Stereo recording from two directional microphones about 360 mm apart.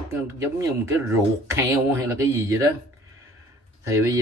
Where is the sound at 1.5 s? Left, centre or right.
Centre.